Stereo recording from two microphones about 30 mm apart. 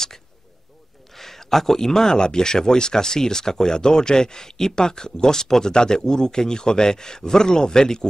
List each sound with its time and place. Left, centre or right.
1.1 s speech: centre